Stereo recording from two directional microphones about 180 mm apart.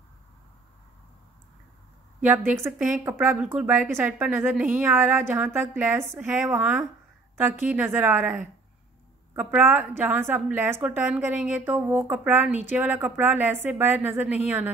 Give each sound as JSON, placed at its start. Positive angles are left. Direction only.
{"t": 2.2, "sound": "a woman's voice", "side_deg": -10}